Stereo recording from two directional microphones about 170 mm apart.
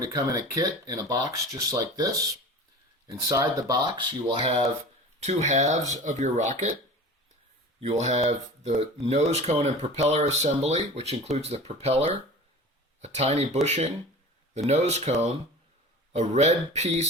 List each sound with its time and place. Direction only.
0.0 s speech: 20° right (ahead or behind); by 6.7 s 45° right (ahead or behind)
7.8 s speech: 40° right (ahead or behind)